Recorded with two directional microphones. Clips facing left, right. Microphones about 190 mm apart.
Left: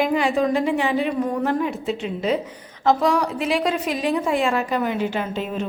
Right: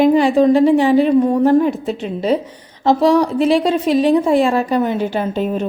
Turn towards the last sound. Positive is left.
turn(degrees=-40)  # may be behind; listen again after turning